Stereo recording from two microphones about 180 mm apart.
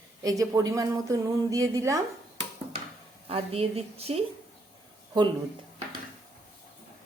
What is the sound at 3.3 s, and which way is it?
Speech, 35° right (ahead or behind).